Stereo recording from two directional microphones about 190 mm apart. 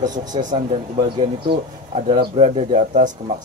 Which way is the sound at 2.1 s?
30° right (ahead or behind).